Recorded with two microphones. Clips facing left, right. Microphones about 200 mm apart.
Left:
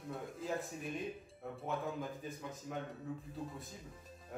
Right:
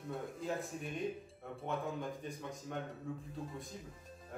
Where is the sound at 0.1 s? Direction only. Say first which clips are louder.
Right 1 dB; centre (ahead or behind).